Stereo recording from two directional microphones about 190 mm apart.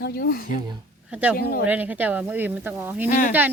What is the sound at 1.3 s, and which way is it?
Speech, 50° left (ahead or behind).